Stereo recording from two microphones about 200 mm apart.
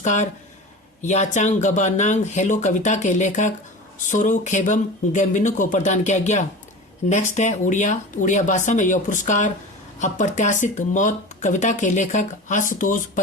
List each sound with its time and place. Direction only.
0.0 s speech: 35° left (ahead or behind)